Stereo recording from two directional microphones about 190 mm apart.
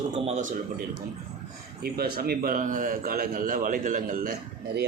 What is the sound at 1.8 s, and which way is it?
A man's voice, 55° right (ahead or behind).